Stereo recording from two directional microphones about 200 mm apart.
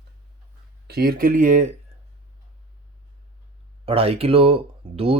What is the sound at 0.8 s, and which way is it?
Speech, 50° right (ahead or behind).